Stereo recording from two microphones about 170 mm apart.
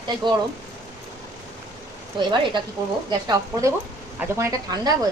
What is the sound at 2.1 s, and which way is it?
Speech, 25° right (ahead or behind).